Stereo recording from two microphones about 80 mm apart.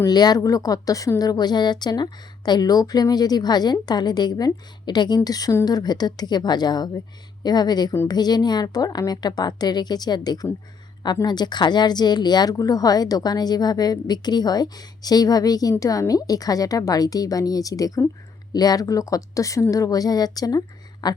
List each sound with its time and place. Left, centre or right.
0.1 s a woman's voice: left